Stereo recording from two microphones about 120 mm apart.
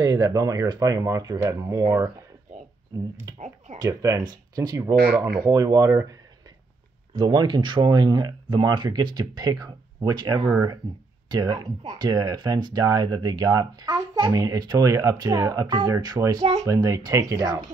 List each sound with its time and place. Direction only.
0.0 s speech: 30° right (ahead or behind)
3.3 s speech: 70° right (ahead or behind)
3.7 s speech: 30° right (ahead or behind)
7.2 s speech: 35° right (ahead or behind)